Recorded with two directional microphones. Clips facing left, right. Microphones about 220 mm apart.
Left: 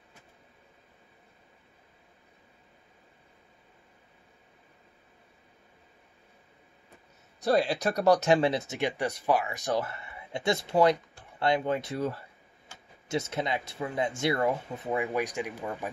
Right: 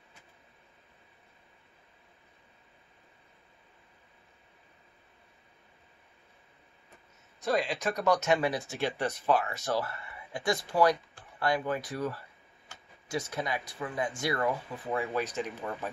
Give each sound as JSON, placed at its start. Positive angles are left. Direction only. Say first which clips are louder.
{"t": 7.3, "sound": "speech", "louder": "left 4 dB", "side_deg": 35}